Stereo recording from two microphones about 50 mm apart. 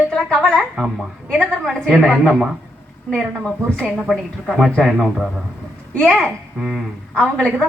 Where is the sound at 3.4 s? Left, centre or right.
Centre.